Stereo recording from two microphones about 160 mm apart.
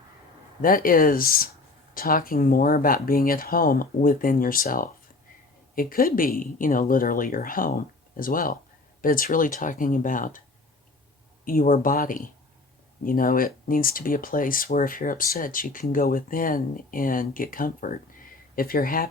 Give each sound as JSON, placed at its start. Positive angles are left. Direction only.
{"t": 0.6, "sound": "speech", "side_deg": 65}
{"t": 11.4, "sound": "speech", "side_deg": 60}